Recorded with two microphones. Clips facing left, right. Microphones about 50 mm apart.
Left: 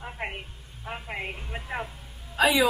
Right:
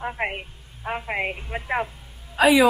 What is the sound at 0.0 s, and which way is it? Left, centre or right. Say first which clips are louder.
A woman's voice: right 7 dB; right.